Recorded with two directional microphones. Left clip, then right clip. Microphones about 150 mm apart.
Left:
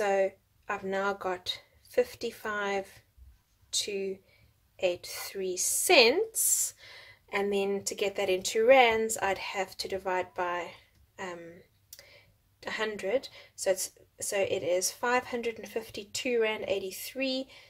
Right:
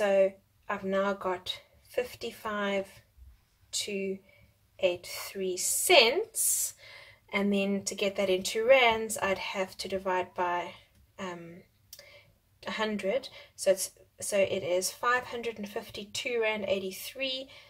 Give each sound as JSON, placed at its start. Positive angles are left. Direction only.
{"t": 0.0, "sound": "speech", "side_deg": 40}
{"t": 12.6, "sound": "speech", "side_deg": 40}